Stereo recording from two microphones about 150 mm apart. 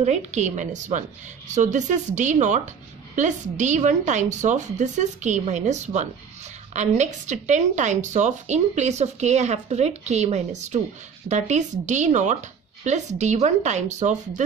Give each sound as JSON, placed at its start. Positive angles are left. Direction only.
{"t": 0.0, "sound": "a woman's voice", "side_deg": -50}